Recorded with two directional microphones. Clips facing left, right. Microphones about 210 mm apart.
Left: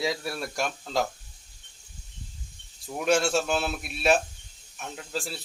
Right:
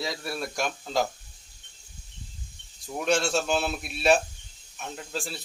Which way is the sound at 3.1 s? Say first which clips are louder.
Left 1 dB; 5° left (ahead or behind).